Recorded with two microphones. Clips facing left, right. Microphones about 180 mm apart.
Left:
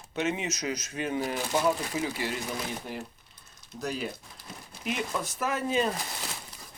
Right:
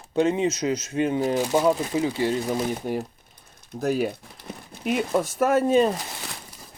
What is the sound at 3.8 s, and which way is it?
Speech, 50° right (ahead or behind).